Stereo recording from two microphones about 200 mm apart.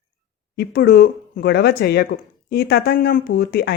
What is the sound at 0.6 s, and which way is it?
Speech, 55° left (ahead or behind).